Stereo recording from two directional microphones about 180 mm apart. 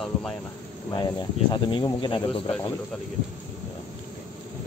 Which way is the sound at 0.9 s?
25° left (ahead or behind).